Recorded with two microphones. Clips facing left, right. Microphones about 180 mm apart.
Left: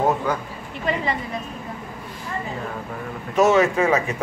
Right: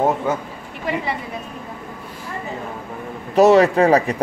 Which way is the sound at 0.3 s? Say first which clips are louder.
Right 2 dB; 25° right (ahead or behind).